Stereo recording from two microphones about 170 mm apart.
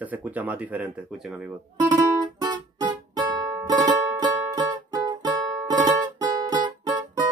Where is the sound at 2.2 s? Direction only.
25° right (ahead or behind).